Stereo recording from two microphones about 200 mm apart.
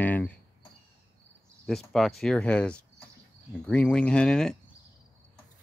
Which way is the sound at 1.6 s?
Centre (ahead or behind).